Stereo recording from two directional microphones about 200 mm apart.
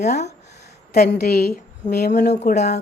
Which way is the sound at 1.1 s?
55° left (ahead or behind).